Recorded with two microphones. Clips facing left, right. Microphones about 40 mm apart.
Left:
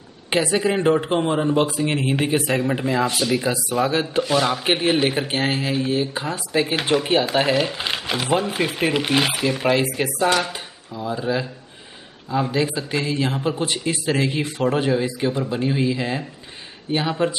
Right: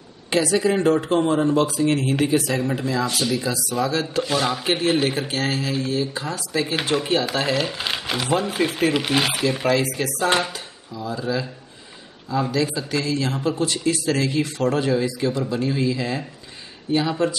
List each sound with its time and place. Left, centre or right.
0.3 s a man's voice: left
4.2 s speech: centre
4.6 s a man's voice: centre
7.5 s speech: centre
9.7 s a man's voice: left